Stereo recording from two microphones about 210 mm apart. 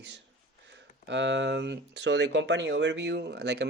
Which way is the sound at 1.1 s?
60° right (ahead or behind).